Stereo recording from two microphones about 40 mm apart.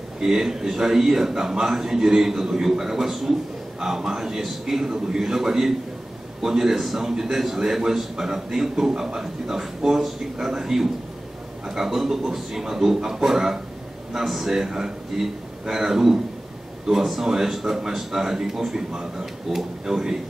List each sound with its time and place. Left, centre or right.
0.2 s a man's voice: centre